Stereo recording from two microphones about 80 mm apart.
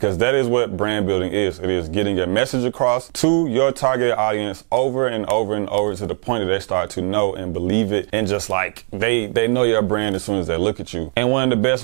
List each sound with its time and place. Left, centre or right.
0.0 s speech: centre